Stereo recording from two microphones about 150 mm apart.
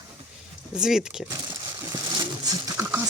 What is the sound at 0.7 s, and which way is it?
Speech, 5° right (ahead or behind).